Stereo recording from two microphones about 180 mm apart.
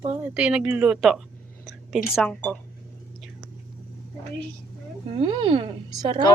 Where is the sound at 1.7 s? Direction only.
5° right (ahead or behind).